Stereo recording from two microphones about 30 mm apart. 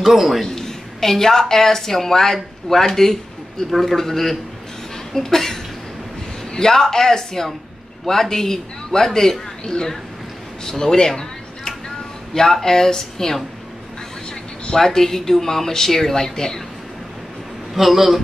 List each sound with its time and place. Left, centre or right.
0.0 s a man's voice: centre
0.6 s a woman's voice: centre
14.7 s a man's voice: centre
17.7 s a man's voice: centre